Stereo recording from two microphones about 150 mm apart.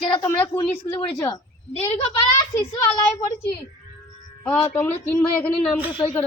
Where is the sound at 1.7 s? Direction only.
45° left (ahead or behind).